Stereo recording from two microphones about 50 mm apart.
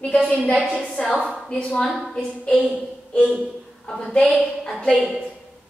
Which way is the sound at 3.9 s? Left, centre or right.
Centre.